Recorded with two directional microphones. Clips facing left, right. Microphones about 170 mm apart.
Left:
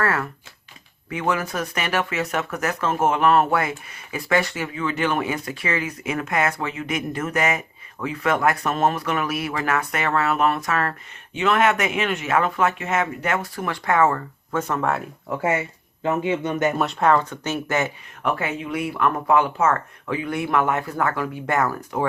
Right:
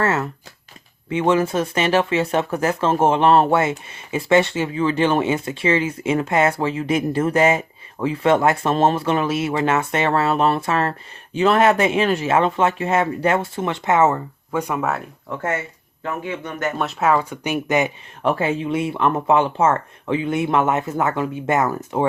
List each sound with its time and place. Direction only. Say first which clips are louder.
0.0 s speech: right 3 dB; 25° right (ahead or behind); by 15.0 s 5° right (ahead or behind)
15.3 s speech: left 2 dB; 10° left (ahead or behind)
16.0 s a man's voice: left 5 dB; 20° left (ahead or behind)
16.7 s speech: right 4 dB; centre (ahead or behind)
18.2 s speech: right 5 dB; 30° right (ahead or behind)